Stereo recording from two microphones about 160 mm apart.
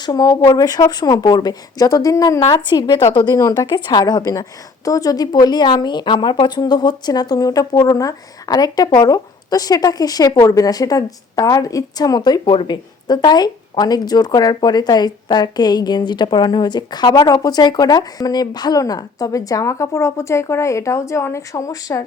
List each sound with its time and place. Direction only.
0.0 s a woman's voice: 25° left (ahead or behind)